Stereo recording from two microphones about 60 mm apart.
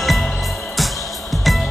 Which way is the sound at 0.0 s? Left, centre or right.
Centre.